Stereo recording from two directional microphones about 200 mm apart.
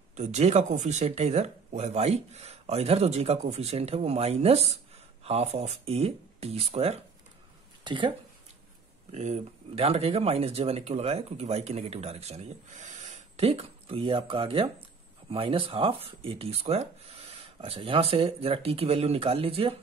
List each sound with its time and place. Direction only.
0.1 s speech: 35° right (ahead or behind)
9.1 s speech: 35° right (ahead or behind)